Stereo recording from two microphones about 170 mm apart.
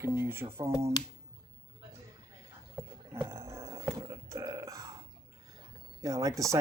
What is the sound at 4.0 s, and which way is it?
Burping, 20° right (ahead or behind).